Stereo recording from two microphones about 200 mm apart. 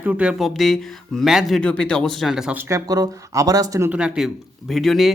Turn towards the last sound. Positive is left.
turn(degrees=0)  # may be behind; listen again after turning